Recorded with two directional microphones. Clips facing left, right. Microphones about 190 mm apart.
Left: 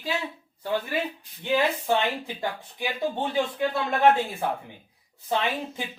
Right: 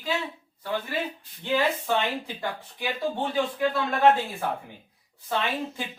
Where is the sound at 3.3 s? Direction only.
20° left (ahead or behind).